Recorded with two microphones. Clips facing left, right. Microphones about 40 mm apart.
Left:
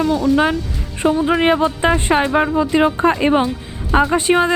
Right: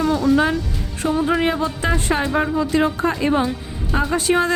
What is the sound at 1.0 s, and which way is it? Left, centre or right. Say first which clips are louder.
Speech: left 4 dB; left.